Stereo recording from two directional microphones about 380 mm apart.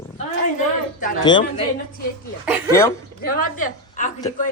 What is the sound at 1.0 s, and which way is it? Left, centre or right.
Speech, centre.